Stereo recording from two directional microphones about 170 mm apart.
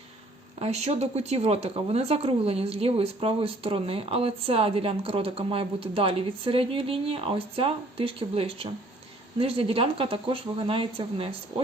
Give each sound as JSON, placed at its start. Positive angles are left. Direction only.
{"t": 0.6, "sound": "speech", "side_deg": -40}